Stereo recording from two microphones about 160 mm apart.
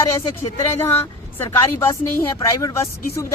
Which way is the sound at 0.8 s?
15° left (ahead or behind).